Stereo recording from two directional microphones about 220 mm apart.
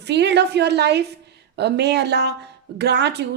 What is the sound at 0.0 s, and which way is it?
A woman's voice, 50° right (ahead or behind).